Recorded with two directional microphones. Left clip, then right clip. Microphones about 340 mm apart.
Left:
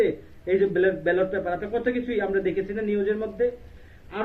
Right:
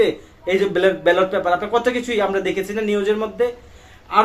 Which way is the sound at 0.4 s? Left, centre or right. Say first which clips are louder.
Right 5 dB; right.